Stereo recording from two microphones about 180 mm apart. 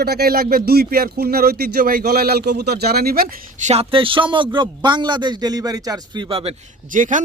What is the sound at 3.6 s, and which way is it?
A man's voice, 35° right (ahead or behind).